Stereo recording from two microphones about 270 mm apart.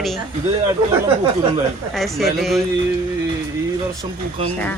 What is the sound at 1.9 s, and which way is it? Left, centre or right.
Speech, centre.